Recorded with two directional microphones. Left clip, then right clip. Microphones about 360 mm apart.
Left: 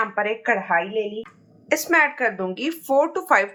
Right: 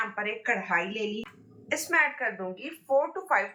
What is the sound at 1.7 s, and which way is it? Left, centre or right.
Speech, left.